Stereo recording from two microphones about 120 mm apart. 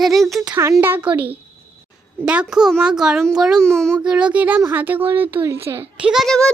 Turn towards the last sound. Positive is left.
turn(degrees=5)  # may be behind; listen again after turning